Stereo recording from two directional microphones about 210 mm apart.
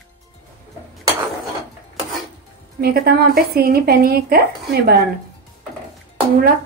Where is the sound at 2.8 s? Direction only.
45° right (ahead or behind).